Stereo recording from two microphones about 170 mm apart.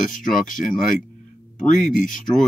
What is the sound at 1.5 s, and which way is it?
Speech, 50° left (ahead or behind).